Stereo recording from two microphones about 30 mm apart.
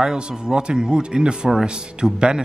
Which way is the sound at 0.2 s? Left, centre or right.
Right.